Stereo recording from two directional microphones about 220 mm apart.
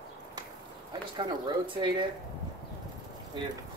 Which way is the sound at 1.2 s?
20° right (ahead or behind).